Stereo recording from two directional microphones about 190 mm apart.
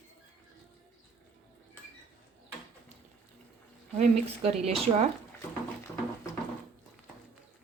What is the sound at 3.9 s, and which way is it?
Speech, 35° right (ahead or behind).